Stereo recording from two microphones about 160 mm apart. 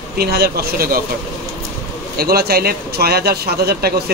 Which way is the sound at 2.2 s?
75° right (ahead or behind).